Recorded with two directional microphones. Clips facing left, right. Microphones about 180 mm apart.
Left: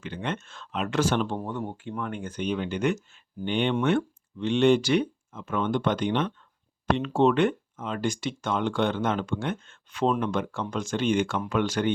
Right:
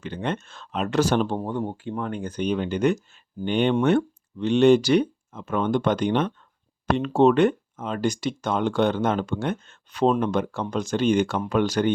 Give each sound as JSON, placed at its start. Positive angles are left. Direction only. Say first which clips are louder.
{"t": 0.0, "sound": "speech", "louder": "right 4 dB", "side_deg": -35}